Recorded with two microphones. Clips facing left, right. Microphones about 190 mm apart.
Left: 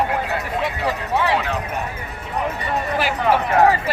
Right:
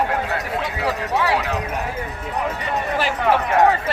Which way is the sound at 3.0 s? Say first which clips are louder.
Even; centre (ahead or behind).